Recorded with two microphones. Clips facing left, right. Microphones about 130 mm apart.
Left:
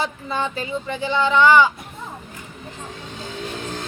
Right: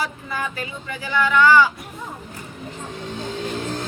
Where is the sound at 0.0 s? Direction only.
25° left (ahead or behind).